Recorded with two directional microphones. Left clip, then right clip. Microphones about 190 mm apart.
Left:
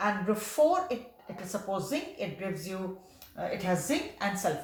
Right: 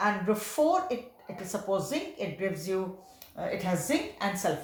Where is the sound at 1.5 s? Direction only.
25° right (ahead or behind).